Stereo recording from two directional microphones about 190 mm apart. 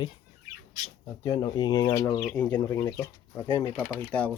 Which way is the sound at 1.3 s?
20° left (ahead or behind).